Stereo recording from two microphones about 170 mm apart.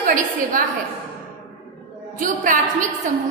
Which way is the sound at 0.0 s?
50° right (ahead or behind).